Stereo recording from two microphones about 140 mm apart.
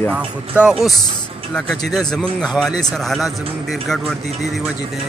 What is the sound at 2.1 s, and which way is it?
Speech, 5° left (ahead or behind).